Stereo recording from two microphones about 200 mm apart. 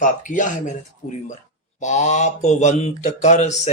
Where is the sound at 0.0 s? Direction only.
40° left (ahead or behind).